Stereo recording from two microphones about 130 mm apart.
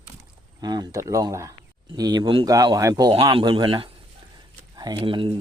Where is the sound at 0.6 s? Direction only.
30° right (ahead or behind).